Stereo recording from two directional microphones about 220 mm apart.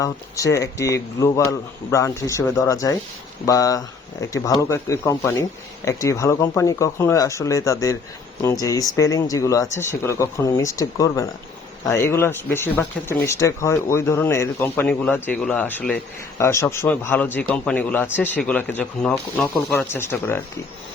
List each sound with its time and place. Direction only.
0.0 s speech: 15° left (ahead or behind)